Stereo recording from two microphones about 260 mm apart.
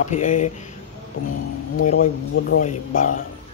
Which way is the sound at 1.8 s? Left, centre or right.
Left.